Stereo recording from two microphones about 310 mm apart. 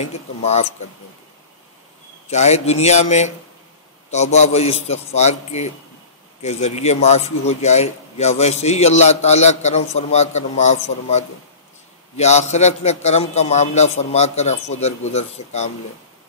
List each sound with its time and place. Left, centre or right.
0.0 s a man's voice: left
2.2 s a man's voice: left